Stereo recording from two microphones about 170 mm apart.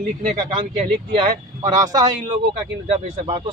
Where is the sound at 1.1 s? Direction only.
25° right (ahead or behind).